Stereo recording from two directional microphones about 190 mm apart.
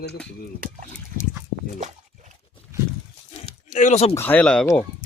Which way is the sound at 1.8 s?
40° right (ahead or behind).